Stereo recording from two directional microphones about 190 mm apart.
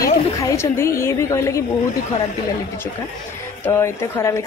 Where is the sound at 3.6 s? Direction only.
15° left (ahead or behind).